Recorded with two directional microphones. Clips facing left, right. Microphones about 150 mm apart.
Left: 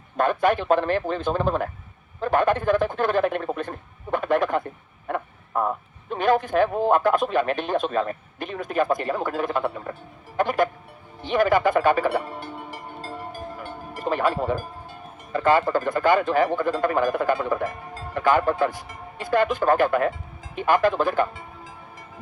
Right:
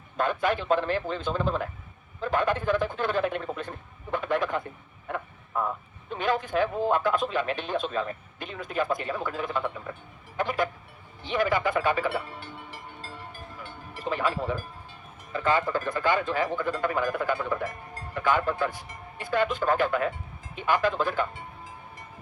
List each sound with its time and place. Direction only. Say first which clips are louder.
0.2 s a man's voice: left 5 dB; 50° left (ahead or behind)
11.3 s music: left 6 dB; 50° left (ahead or behind)
15.9 s speech: left 7 dB; 50° left (ahead or behind)
18.7 s speech: left 4 dB; 90° left
19.2 s speech: left 5 dB; 50° left (ahead or behind)